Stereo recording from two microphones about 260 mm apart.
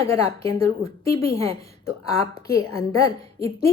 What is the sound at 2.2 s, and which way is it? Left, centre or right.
Speech, centre.